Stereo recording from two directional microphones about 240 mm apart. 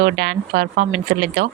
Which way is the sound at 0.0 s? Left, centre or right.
Right.